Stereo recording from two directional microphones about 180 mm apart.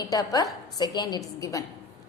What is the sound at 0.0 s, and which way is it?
A woman's voice, 20° left (ahead or behind).